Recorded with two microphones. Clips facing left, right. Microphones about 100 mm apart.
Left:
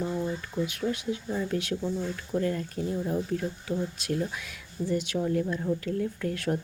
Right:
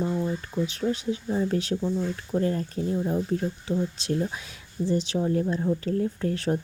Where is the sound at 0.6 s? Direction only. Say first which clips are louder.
Right 3 dB; 30° right (ahead or behind).